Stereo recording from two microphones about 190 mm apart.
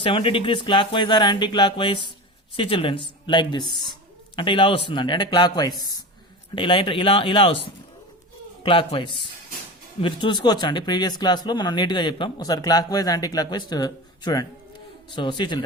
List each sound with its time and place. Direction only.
0.0 s speech: 25° left (ahead or behind)
8.6 s speech: 25° left (ahead or behind)